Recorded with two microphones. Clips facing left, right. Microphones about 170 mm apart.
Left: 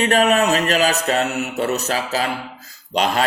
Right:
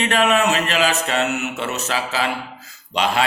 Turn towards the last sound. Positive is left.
turn(degrees=40)  # may be behind; listen again after turning